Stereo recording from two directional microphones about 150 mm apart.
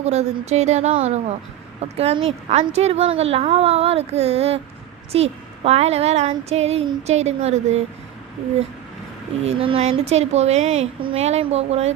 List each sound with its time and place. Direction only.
0.0 s a woman's voice: 45° right (ahead or behind)
9.4 s a woman's voice: 40° right (ahead or behind)